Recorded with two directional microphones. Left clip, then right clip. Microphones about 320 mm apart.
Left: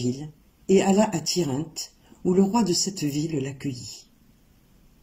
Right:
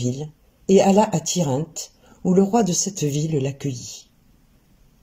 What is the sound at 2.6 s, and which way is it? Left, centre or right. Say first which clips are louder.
Speech: right 2 dB; right.